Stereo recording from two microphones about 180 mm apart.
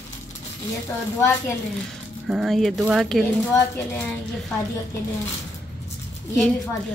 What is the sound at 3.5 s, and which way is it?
Speech, 15° left (ahead or behind).